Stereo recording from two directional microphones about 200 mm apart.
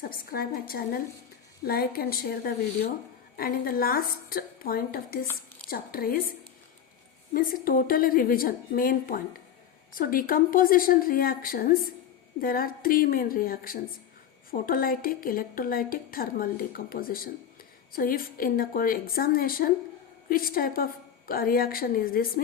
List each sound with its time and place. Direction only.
0.0 s a woman's voice: 45° left (ahead or behind)
7.3 s a woman's voice: 45° left (ahead or behind)